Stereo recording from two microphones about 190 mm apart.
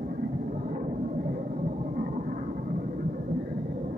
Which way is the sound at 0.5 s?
40° right (ahead or behind).